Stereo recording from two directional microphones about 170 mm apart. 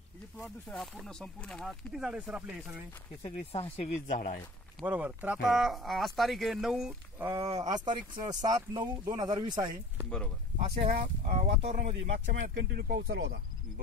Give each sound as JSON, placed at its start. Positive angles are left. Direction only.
{"t": 0.4, "sound": "speech", "side_deg": 5}
{"t": 3.2, "sound": "speech", "side_deg": 30}
{"t": 4.8, "sound": "speech", "side_deg": -10}
{"t": 10.0, "sound": "speech", "side_deg": 5}
{"t": 11.0, "sound": "speech", "side_deg": -40}
{"t": 11.7, "sound": "speech", "side_deg": -50}
{"t": 12.5, "sound": "speech", "side_deg": -65}